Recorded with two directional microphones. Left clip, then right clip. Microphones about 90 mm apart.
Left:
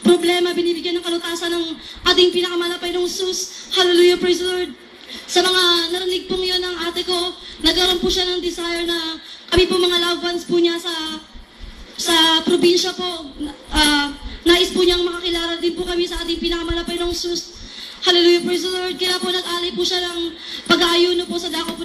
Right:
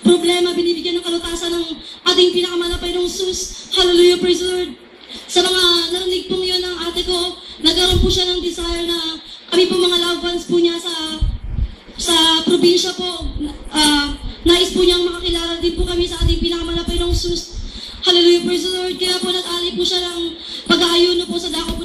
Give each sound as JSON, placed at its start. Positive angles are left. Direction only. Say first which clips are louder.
{"t": 0.0, "sound": "speech", "louder": "right 1 dB", "side_deg": 30}
{"t": 12.1, "sound": "speech", "louder": "right 1 dB", "side_deg": 35}